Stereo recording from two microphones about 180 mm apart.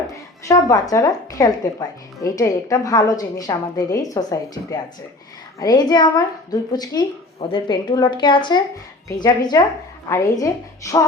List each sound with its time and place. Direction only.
0.4 s a woman's voice: 20° left (ahead or behind)